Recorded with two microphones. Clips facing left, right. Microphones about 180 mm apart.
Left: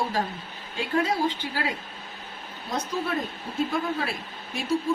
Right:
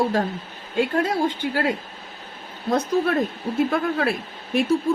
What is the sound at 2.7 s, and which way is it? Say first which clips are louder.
Speech: right 8 dB; 60° right (ahead or behind).